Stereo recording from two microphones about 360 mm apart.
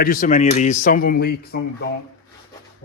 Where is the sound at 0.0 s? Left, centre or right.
Left.